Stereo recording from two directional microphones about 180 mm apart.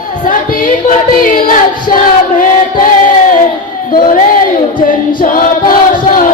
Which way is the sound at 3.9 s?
50° left (ahead or behind).